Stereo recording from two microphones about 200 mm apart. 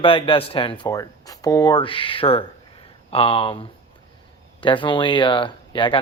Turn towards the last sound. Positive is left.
turn(degrees=25)  # may be behind; listen again after turning